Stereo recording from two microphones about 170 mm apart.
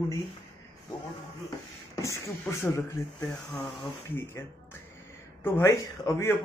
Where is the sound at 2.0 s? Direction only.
15° left (ahead or behind).